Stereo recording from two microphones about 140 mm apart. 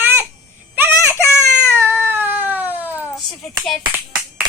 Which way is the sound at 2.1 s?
15° right (ahead or behind).